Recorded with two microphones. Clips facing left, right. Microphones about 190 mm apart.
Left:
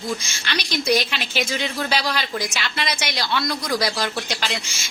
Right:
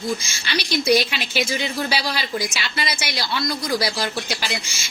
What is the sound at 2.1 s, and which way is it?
Speech, 50° left (ahead or behind).